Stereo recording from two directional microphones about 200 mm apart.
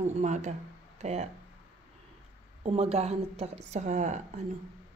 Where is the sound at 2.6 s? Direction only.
30° right (ahead or behind).